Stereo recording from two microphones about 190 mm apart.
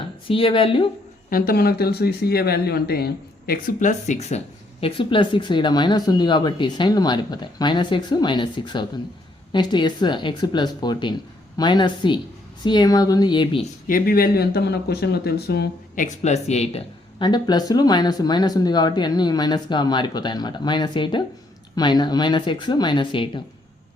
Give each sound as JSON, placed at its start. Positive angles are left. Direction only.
{"t": 0.3, "sound": "speech", "side_deg": 30}
{"t": 1.3, "sound": "speech", "side_deg": 50}
{"t": 13.8, "sound": "speech", "side_deg": 50}
{"t": 16.0, "sound": "speech", "side_deg": 35}